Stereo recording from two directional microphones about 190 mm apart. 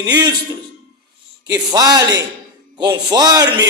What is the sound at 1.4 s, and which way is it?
A man's voice, 20° right (ahead or behind).